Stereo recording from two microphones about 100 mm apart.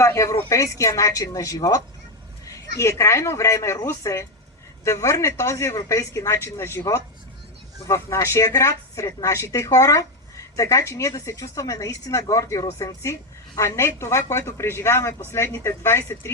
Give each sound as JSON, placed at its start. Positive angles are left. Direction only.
{"t": 0.0, "sound": "speech", "side_deg": 30}